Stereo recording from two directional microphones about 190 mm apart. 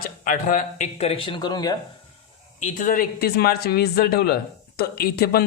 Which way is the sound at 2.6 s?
45° left (ahead or behind).